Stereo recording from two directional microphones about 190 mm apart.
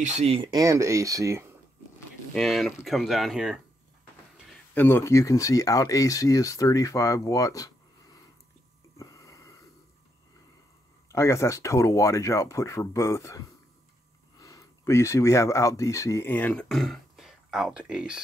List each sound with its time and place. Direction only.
0.0 s speech: 35° right (ahead or behind); by 1.4 s 15° right (ahead or behind)
2.3 s speech: centre (ahead or behind)
4.7 s speech: 10° left (ahead or behind)
8.9 s a sound: 15° left (ahead or behind)
11.1 s speech: 15° left (ahead or behind); by 18.2 s 5° right (ahead or behind)